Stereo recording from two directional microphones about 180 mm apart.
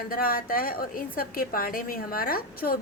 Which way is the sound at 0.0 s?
55° left (ahead or behind).